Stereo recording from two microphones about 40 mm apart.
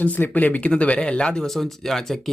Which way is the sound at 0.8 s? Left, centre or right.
Left.